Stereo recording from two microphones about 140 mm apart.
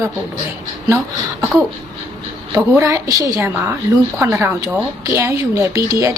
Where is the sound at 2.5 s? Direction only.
20° right (ahead or behind).